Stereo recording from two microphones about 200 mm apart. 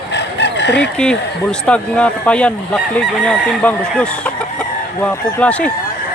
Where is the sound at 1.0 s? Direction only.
5° left (ahead or behind).